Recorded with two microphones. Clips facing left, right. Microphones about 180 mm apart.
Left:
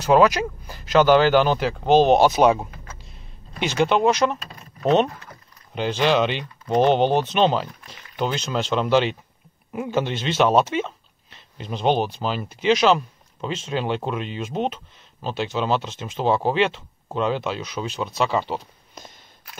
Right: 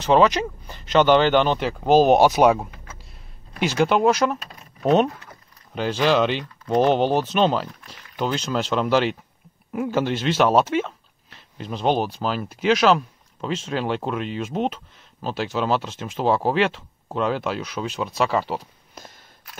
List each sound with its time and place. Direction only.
0.0 s speech: 5° left (ahead or behind)